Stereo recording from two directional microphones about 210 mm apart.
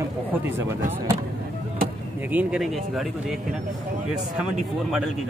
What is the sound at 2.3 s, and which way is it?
Speech, 5° right (ahead or behind).